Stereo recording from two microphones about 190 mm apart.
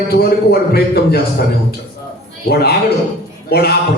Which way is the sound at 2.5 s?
55° left (ahead or behind).